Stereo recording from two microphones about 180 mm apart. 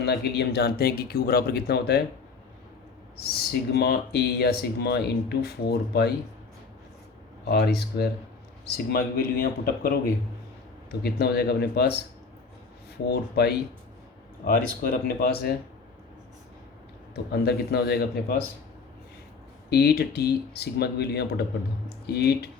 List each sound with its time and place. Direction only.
0.0 s speech: 65° left (ahead or behind)
3.3 s speech: 60° left (ahead or behind)
7.4 s speech: 60° left (ahead or behind)
11.0 s speech: 60° left (ahead or behind)
13.1 s speech: 65° left (ahead or behind)
14.4 s speech: 50° left (ahead or behind)
17.3 s speech: 65° left (ahead or behind)
19.7 s speech: 60° left (ahead or behind)
21.8 s a sound: 65° left (ahead or behind)